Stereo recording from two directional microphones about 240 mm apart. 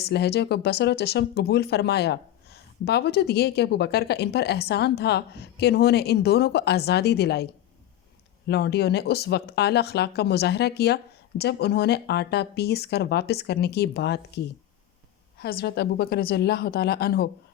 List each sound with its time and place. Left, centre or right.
0.0 s a woman's voice: left